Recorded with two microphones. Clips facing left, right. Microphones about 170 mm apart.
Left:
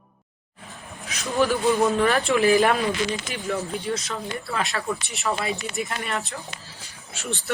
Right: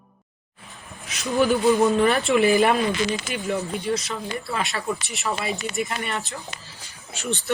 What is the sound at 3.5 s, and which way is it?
A woman's voice, centre (ahead or behind).